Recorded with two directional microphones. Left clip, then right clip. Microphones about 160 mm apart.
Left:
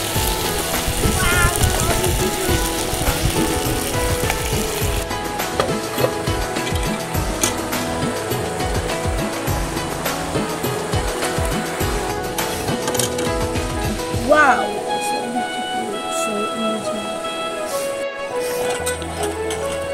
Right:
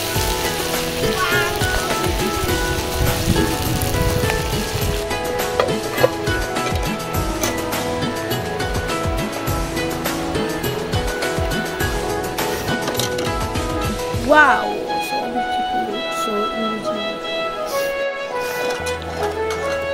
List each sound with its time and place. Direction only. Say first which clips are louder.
14.3 s music: right 1 dB; 90° right